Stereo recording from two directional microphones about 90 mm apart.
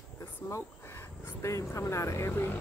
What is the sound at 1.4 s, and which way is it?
Speech, 35° left (ahead or behind).